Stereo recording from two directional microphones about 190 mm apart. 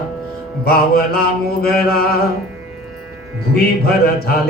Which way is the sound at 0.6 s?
55° left (ahead or behind).